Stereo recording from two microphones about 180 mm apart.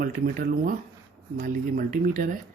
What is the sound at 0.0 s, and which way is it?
Speech, 50° right (ahead or behind).